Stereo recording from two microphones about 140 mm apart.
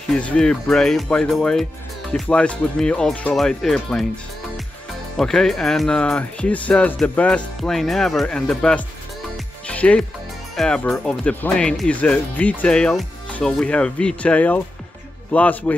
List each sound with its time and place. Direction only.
0.1 s speech: 5° left (ahead or behind)
5.1 s speech: 5° left (ahead or behind)
9.7 s music: 10° left (ahead or behind)
10.5 s speech: 5° left (ahead or behind)